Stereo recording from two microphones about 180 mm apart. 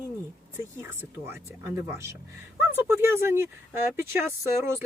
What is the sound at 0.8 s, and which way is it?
Speech, 10° right (ahead or behind).